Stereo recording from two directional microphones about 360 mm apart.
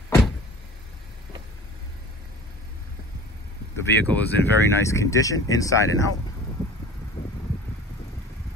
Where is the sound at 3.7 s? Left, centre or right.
Centre.